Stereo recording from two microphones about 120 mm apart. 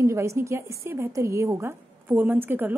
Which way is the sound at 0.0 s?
25° right (ahead or behind).